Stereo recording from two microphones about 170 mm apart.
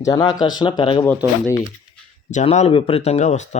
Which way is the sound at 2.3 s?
45° left (ahead or behind).